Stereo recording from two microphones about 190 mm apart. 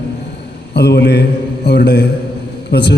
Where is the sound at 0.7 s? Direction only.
60° left (ahead or behind).